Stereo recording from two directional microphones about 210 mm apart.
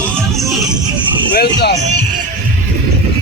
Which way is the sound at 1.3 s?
50° left (ahead or behind).